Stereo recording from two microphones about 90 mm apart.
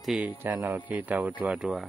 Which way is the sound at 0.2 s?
20° right (ahead or behind).